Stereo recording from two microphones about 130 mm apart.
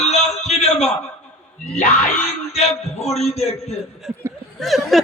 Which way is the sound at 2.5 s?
55° left (ahead or behind).